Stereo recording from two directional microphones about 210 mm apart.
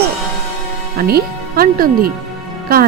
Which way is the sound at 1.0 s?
45° right (ahead or behind).